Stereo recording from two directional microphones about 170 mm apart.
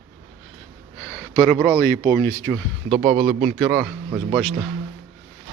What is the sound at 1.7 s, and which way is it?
Speech, 15° left (ahead or behind).